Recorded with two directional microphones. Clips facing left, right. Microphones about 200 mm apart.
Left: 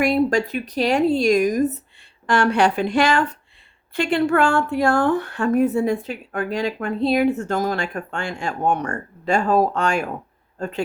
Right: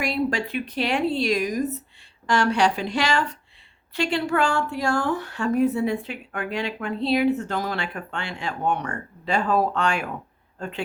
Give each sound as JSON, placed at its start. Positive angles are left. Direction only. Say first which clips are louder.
{"t": 0.0, "sound": "speech", "louder": "left 6 dB", "side_deg": 45}